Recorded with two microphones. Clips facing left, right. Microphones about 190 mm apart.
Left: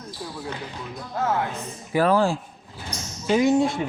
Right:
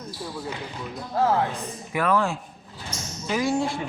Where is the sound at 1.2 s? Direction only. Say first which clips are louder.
Right 3 dB; 30° right (ahead or behind).